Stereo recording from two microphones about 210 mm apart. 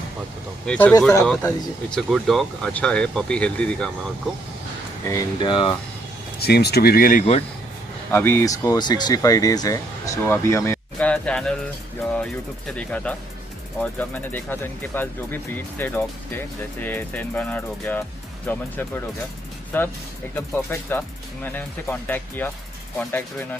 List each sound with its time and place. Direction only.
0.7 s speech: 5° left (ahead or behind)
5.0 s speech: 20° left (ahead or behind)
6.4 s speech: 50° left (ahead or behind); by 7.4 s 35° left (ahead or behind)
8.1 s speech: 10° left (ahead or behind)